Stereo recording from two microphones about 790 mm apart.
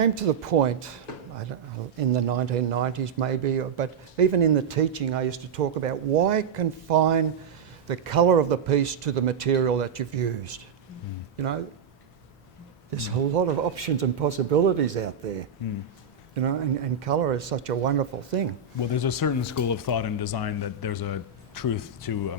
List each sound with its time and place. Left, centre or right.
0.0 s speech: right
2.0 s speech: right
13.0 s speech: right
18.9 s speech: left